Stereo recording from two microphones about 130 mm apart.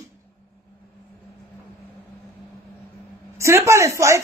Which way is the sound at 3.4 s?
20° right (ahead or behind).